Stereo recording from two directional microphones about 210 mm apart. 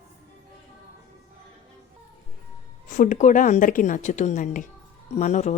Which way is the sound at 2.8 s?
40° left (ahead or behind).